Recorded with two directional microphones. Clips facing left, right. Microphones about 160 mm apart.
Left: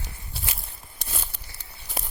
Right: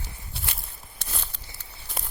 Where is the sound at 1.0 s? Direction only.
15° left (ahead or behind).